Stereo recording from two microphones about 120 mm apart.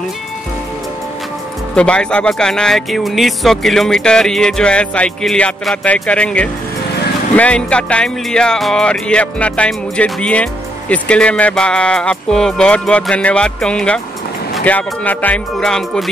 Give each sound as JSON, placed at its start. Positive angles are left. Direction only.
{"t": 1.8, "sound": "speech", "side_deg": 10}